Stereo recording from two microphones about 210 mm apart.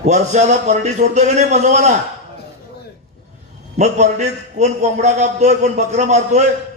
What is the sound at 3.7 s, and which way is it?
A man's voice, 30° right (ahead or behind).